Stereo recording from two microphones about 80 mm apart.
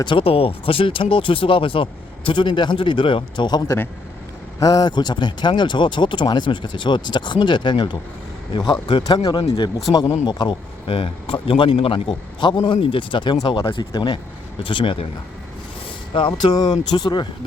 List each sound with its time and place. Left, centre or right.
0.0 s speech: left
4.6 s speech: left
9.4 s speech: left
9.9 s speech: left
11.3 s speech: left
16.1 s speech: left